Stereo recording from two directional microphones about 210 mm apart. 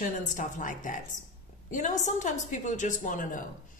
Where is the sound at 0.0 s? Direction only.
40° left (ahead or behind).